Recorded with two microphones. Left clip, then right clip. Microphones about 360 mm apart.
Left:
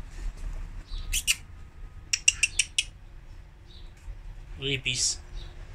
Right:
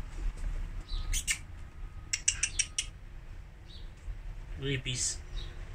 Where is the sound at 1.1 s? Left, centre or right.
Centre.